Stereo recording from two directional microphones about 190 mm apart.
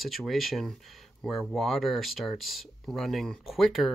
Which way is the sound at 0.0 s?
Centre (ahead or behind).